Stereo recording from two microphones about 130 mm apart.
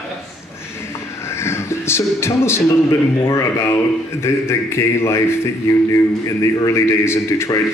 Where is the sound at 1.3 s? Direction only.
20° left (ahead or behind).